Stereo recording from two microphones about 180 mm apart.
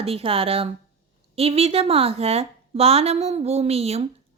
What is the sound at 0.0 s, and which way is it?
A woman's voice, 30° right (ahead or behind).